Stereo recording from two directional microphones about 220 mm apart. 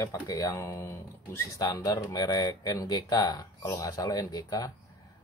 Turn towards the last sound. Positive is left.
turn(degrees=15)  # may be behind; listen again after turning